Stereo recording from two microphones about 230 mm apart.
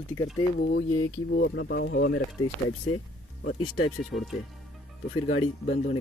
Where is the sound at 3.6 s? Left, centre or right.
Left.